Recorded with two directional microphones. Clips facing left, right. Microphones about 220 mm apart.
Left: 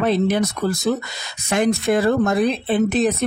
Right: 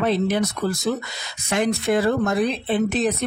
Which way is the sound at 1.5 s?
45° left (ahead or behind).